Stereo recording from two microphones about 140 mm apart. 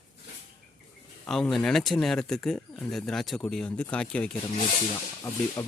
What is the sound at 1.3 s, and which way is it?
Speech, 5° left (ahead or behind).